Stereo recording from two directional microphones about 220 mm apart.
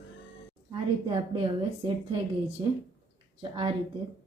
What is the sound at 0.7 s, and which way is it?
A woman's voice, 20° right (ahead or behind).